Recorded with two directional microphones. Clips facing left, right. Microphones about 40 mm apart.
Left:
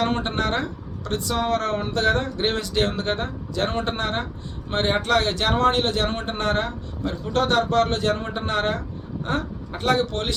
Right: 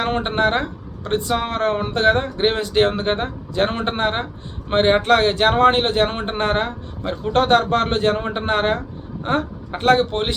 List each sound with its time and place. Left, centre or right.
0.0 s a man's voice: right